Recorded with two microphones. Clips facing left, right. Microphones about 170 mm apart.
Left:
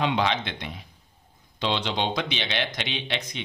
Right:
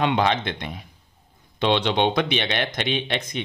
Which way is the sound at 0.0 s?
50° right (ahead or behind).